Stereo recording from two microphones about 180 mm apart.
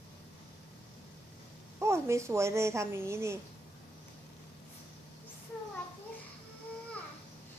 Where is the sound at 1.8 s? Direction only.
15° right (ahead or behind).